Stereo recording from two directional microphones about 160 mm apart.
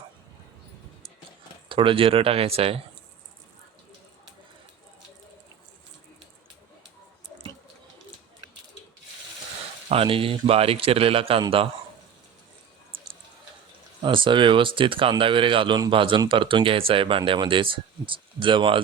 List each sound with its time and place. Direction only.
1.7 s speech: 35° right (ahead or behind)
9.9 s speech: 35° right (ahead or behind)
14.0 s speech: 30° right (ahead or behind)